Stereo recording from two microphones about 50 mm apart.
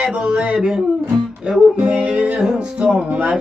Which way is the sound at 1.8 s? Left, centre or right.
Right.